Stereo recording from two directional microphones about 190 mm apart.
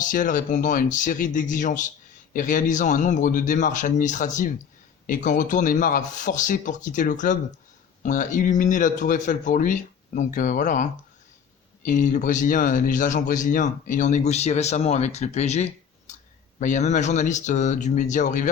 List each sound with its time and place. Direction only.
0.0 s a man's voice: 45° left (ahead or behind)